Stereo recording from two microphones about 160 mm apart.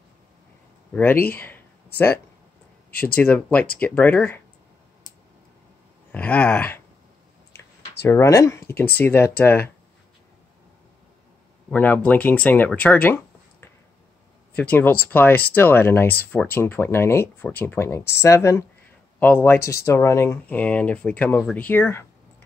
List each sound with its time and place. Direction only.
1.2 s speech: 10° left (ahead or behind)
3.2 s speech: 10° left (ahead or behind)
6.1 s speech: 10° left (ahead or behind)
8.0 s speech: 20° left (ahead or behind)
11.7 s speech: 10° left (ahead or behind)